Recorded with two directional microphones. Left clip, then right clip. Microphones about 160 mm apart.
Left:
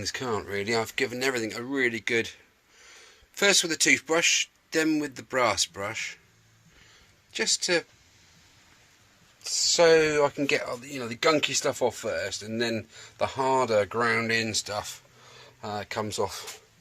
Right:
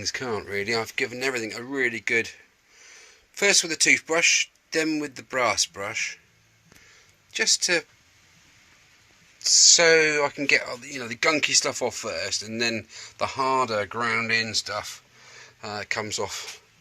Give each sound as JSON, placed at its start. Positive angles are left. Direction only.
{"t": 0.2, "sound": "speech", "side_deg": -10}
{"t": 7.3, "sound": "speech", "side_deg": 5}
{"t": 9.4, "sound": "speech", "side_deg": 0}
{"t": 9.8, "sound": "speech", "side_deg": 20}
{"t": 13.4, "sound": "speech", "side_deg": 20}
{"t": 14.3, "sound": "speech", "side_deg": 35}
{"t": 15.3, "sound": "speech", "side_deg": 15}